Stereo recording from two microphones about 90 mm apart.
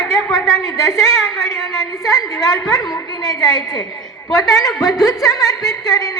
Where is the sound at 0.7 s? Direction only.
35° left (ahead or behind).